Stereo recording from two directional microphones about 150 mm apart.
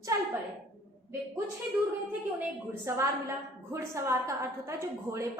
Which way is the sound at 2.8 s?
20° right (ahead or behind).